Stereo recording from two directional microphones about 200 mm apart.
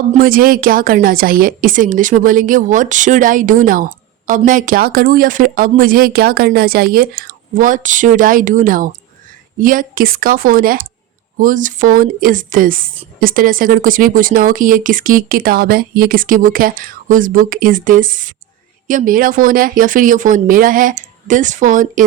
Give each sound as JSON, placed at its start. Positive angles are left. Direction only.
{"t": 0.1, "sound": "a woman's voice", "side_deg": -45}